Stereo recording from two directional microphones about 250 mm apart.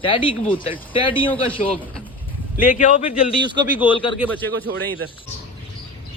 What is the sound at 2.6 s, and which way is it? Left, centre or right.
Speech, left.